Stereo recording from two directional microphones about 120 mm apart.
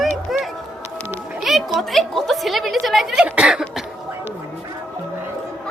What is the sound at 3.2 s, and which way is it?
Cough, 10° right (ahead or behind).